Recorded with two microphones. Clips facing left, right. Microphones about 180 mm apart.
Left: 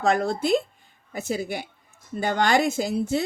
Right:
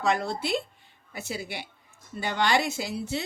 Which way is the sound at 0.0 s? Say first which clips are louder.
Left 5 dB; 50° left (ahead or behind).